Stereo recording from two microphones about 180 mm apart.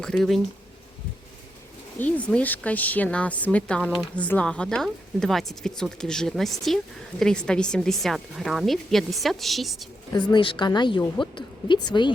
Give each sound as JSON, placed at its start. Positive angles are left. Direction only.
{"t": 0.0, "sound": "a woman's voice", "side_deg": 5}
{"t": 2.0, "sound": "a woman's voice", "side_deg": 10}
{"t": 10.1, "sound": "a woman's voice", "side_deg": 25}